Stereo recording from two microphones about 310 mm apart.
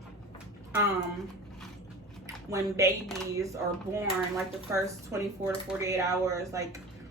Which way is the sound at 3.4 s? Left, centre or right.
Centre.